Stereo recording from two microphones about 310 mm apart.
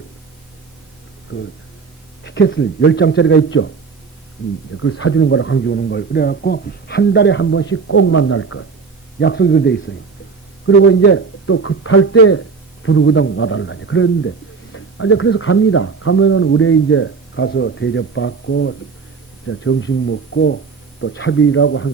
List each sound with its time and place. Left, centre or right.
2.2 s a man's voice: left
4.8 s a man's voice: left
10.8 s a man's voice: left